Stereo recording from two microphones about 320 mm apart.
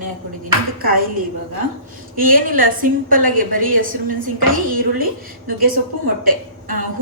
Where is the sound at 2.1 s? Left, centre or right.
Right.